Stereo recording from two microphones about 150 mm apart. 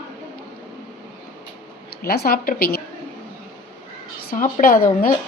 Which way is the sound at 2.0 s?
90° left.